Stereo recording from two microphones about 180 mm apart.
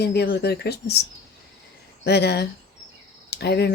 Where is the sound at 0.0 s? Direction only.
65° left (ahead or behind).